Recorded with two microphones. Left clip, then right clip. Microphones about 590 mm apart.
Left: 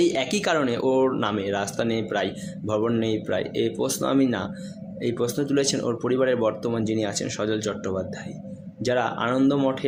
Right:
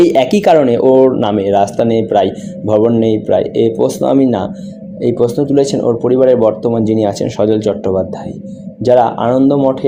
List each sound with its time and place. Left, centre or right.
0.0 s speech: left